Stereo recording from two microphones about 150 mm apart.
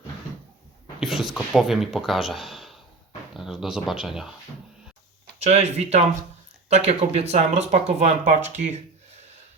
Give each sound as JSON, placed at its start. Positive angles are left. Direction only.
{"t": 0.9, "sound": "speech", "side_deg": -5}
{"t": 5.4, "sound": "speech", "side_deg": -45}